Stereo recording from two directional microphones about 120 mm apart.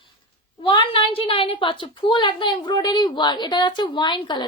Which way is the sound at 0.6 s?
40° left (ahead or behind).